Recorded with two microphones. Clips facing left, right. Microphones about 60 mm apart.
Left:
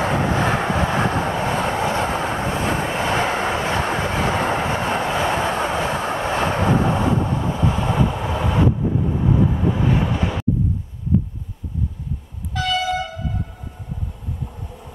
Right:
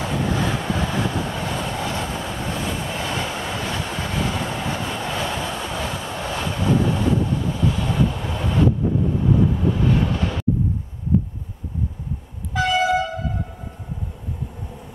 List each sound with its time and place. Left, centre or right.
0.0 s train: left
2.9 s vehicle: left
4.0 s train: left
4.6 s vehicle: left
8.0 s vehicle: centre
12.5 s vehicle horn: right